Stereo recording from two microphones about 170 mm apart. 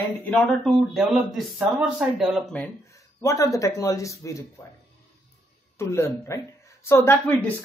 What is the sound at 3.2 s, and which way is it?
Speech, 20° left (ahead or behind).